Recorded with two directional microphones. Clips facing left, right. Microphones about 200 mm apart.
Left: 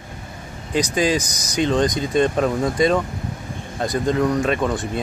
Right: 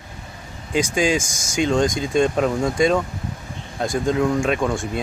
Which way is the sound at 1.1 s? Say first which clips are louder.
Even; 50° right (ahead or behind).